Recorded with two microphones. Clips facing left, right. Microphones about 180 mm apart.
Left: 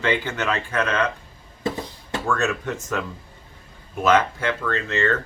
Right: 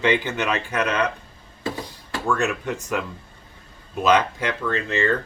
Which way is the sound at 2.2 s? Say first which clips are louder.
Right 1 dB; 15° right (ahead or behind).